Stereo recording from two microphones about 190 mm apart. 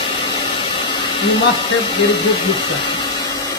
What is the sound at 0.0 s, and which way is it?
Vacuum cleaner, 25° left (ahead or behind).